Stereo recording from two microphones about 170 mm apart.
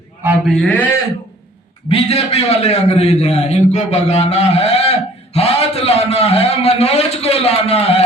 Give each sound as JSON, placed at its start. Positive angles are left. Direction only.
{"t": 0.4, "sound": "a man's voice", "side_deg": 5}
{"t": 1.9, "sound": "a man's voice", "side_deg": 35}